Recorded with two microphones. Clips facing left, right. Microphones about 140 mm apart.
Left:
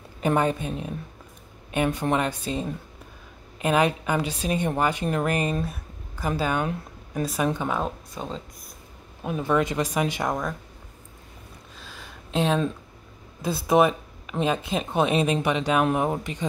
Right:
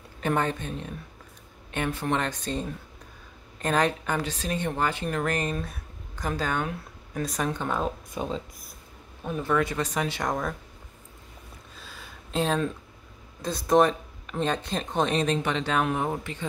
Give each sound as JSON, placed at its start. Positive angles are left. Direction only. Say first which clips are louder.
{"t": 0.2, "sound": "a woman's voice", "louder": "left 4 dB", "side_deg": 15}
{"t": 8.1, "sound": "speech", "louder": "right 3 dB", "side_deg": -10}
{"t": 9.2, "sound": "a woman's voice", "louder": "left 2 dB", "side_deg": 15}
{"t": 11.8, "sound": "a sound", "louder": "left 2 dB", "side_deg": 0}
{"t": 13.4, "sound": "a woman's voice", "louder": "left 1 dB", "side_deg": 5}